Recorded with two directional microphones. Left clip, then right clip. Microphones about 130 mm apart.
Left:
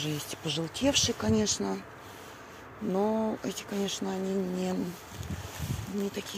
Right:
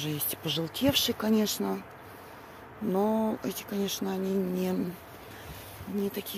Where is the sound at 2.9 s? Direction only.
30° right (ahead or behind).